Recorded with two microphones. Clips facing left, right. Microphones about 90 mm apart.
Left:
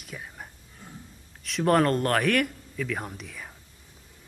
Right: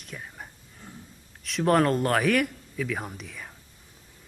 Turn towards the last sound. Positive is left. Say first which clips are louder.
# even
turn(degrees=0)  # may be behind; listen again after turning